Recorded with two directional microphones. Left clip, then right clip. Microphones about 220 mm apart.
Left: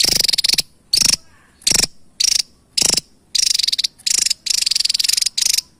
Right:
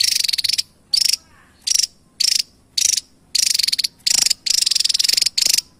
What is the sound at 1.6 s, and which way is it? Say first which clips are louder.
Mechanisms: left 2 dB; 30° left (ahead or behind).